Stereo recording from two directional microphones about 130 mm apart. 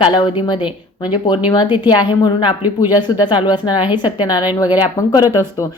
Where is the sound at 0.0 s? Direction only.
35° left (ahead or behind).